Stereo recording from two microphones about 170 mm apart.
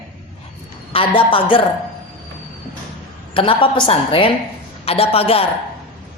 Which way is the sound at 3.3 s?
30° left (ahead or behind).